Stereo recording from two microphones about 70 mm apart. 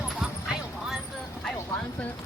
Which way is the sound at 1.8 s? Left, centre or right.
Centre.